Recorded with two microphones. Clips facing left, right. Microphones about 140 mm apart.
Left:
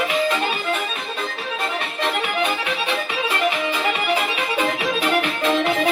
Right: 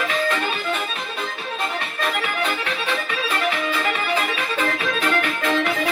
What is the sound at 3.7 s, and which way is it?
Music, 20° left (ahead or behind).